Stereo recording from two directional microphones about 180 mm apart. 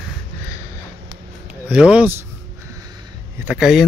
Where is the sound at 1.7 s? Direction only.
5° right (ahead or behind).